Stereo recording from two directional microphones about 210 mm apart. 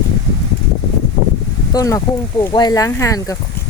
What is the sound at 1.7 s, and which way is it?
Speech, 15° left (ahead or behind).